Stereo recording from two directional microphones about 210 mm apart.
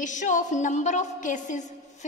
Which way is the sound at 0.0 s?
35° left (ahead or behind).